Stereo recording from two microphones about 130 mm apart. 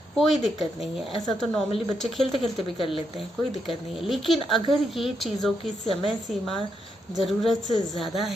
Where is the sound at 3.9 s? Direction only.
Centre (ahead or behind).